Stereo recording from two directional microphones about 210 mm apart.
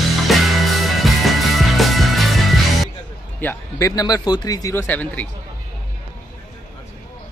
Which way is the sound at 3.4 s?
15° left (ahead or behind).